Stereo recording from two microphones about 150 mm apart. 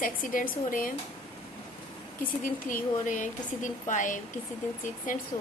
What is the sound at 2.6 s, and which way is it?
A woman's voice, 60° left (ahead or behind).